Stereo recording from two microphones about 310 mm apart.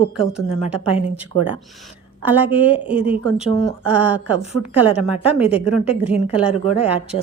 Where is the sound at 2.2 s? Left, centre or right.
Centre.